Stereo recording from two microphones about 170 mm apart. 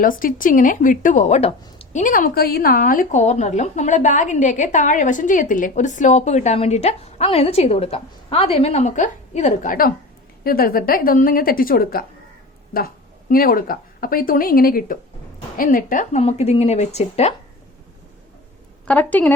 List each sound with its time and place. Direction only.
0.0 s a woman's voice: 55° left (ahead or behind)
16.2 s speech: 35° left (ahead or behind)
18.9 s a woman's voice: 10° left (ahead or behind)